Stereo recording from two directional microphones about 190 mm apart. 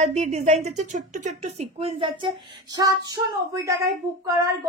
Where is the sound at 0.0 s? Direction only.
35° right (ahead or behind).